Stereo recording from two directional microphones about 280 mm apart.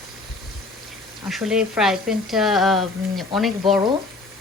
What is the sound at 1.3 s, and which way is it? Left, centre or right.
A woman's voice, centre.